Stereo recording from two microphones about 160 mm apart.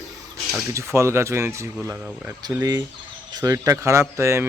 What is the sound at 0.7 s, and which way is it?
Speech, 15° right (ahead or behind).